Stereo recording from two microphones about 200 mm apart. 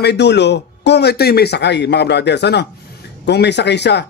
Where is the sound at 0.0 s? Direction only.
55° left (ahead or behind).